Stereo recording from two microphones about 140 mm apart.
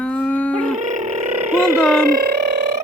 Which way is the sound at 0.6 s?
60° right (ahead or behind).